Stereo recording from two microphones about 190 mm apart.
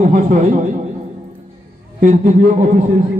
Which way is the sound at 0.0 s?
40° right (ahead or behind).